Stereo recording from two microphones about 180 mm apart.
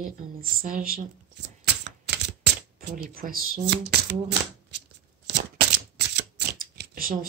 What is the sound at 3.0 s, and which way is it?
Speech, 55° right (ahead or behind).